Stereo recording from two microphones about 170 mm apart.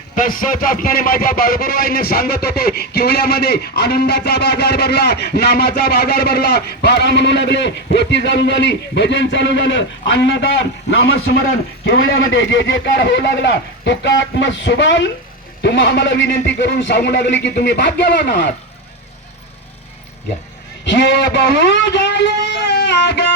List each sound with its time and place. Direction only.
0.2 s a man's voice: 55° left (ahead or behind); by 18.4 s 75° left (ahead or behind)
20.8 s a man's voice: 90° left
22.6 s music: 90° left